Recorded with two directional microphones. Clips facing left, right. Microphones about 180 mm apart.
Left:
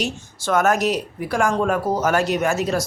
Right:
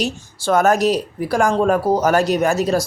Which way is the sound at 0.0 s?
35° right (ahead or behind).